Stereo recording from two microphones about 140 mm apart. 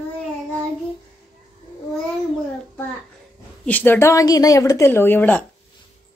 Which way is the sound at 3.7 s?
15° left (ahead or behind).